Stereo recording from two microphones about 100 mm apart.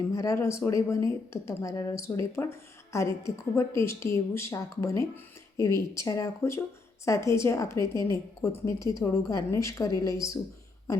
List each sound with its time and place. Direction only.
0.0 s a woman's voice: 35° left (ahead or behind)